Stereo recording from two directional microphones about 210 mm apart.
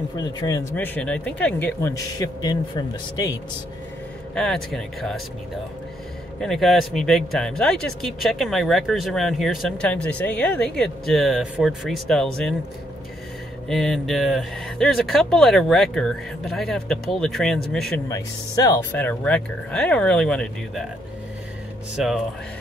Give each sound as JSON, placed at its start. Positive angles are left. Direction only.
{"t": 0.2, "sound": "speech", "side_deg": 20}
{"t": 0.7, "sound": "speech", "side_deg": 5}
{"t": 4.4, "sound": "speech", "side_deg": 0}
{"t": 6.4, "sound": "speech", "side_deg": 0}
{"t": 13.7, "sound": "speech", "side_deg": 0}
{"t": 18.0, "sound": "speech", "side_deg": 15}
{"t": 21.9, "sound": "speech", "side_deg": -5}